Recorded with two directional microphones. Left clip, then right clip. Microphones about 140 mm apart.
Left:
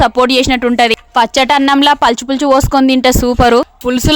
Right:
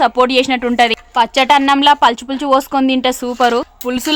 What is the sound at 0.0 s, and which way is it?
Speech, 35° left (ahead or behind).